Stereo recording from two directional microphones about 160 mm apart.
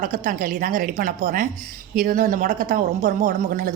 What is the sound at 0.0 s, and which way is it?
A woman's voice, 55° right (ahead or behind).